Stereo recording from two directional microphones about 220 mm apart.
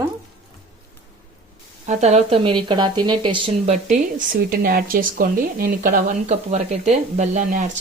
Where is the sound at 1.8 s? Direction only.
30° right (ahead or behind).